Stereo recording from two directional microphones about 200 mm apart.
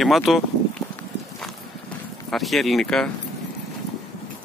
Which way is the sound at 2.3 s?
Centre (ahead or behind).